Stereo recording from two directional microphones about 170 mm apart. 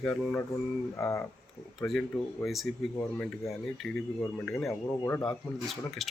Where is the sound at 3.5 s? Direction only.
Centre (ahead or behind).